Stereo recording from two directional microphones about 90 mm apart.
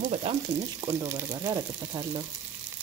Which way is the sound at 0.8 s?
40° right (ahead or behind).